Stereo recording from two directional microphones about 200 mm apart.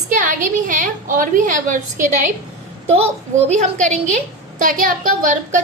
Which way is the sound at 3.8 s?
35° right (ahead or behind).